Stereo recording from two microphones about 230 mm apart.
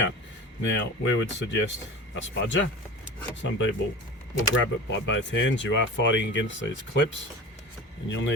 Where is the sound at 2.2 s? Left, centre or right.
Left.